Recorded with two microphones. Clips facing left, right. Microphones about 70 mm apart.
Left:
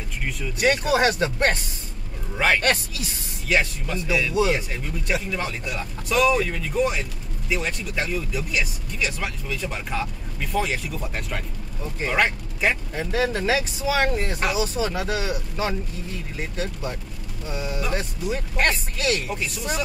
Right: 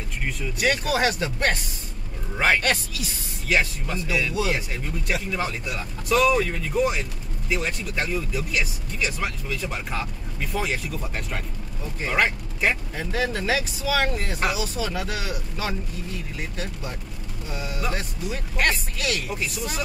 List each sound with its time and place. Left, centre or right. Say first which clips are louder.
0.6 s speech: left 3 dB; left
2.3 s speech: even; centre
2.6 s speech: left 2 dB; left
3.4 s speech: left 1 dB; centre
12.9 s speech: left 2 dB; left
17.9 s speech: left 3 dB; left